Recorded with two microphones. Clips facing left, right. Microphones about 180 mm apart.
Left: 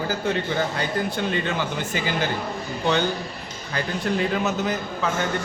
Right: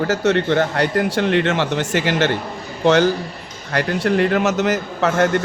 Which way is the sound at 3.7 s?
75° right (ahead or behind).